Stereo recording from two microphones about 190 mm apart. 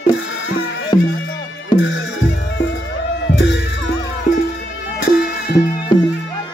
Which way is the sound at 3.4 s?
70° left (ahead or behind).